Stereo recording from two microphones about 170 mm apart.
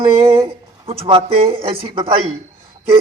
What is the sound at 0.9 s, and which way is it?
Speech, 35° right (ahead or behind).